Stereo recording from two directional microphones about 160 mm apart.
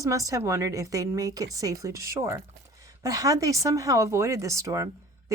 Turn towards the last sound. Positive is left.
turn(degrees=-20)  # may be behind; listen again after turning